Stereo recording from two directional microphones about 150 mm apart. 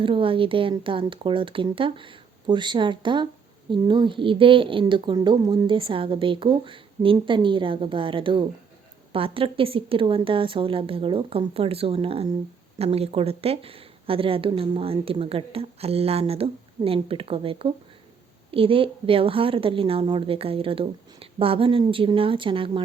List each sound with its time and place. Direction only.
0.0 s a woman's voice: 35° right (ahead or behind)